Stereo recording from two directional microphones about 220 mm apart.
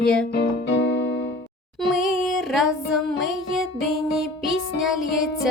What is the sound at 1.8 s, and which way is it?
Music, centre (ahead or behind).